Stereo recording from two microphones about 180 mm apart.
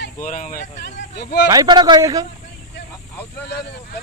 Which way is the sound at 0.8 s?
75° left (ahead or behind).